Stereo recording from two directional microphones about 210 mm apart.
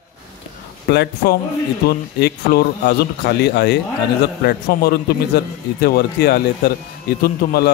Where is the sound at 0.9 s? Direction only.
50° left (ahead or behind).